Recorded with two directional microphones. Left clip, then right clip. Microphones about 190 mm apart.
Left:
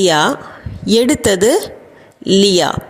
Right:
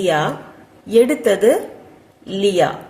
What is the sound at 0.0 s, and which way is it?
A woman's voice, 50° left (ahead or behind).